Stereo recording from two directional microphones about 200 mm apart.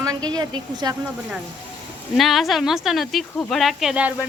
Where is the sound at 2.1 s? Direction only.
Centre (ahead or behind).